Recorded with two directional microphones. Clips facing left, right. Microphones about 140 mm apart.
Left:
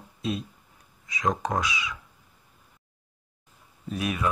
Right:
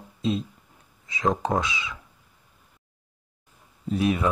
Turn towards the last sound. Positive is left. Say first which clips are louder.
# right 5 dB
turn(degrees=-30)  # may be behind; listen again after turning